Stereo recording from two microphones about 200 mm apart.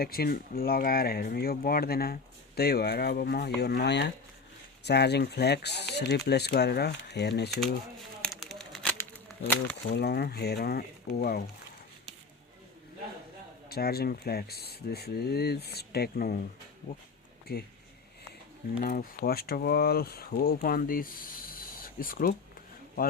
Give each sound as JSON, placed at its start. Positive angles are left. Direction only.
{"t": 0.0, "sound": "speech", "side_deg": 50}
{"t": 8.2, "sound": "a sound", "side_deg": 0}
{"t": 9.8, "sound": "speech", "side_deg": 55}
{"t": 13.7, "sound": "speech", "side_deg": 50}
{"t": 17.5, "sound": "speech", "side_deg": 50}
{"t": 18.8, "sound": "speech", "side_deg": 50}